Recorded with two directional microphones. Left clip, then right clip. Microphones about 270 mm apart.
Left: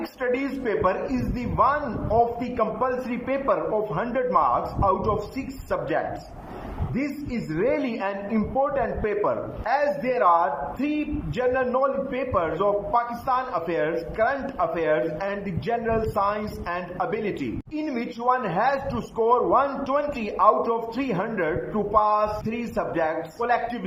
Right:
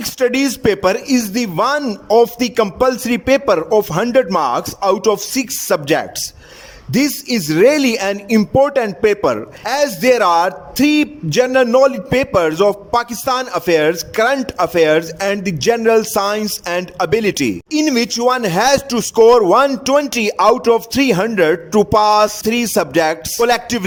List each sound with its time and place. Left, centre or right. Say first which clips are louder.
0.2 s speech: right 11 dB; right